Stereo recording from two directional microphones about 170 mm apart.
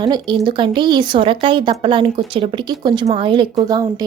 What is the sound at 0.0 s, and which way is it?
Speech, 25° right (ahead or behind).